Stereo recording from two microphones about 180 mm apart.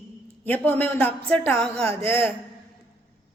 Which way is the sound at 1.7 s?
35° right (ahead or behind).